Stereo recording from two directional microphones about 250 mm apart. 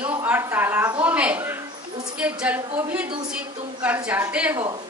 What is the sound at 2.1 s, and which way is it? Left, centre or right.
A woman's voice, centre.